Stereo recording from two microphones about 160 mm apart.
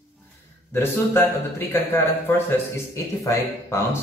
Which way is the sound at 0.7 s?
15° left (ahead or behind).